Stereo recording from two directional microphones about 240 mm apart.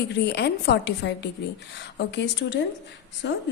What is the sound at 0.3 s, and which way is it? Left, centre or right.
A woman's voice, left.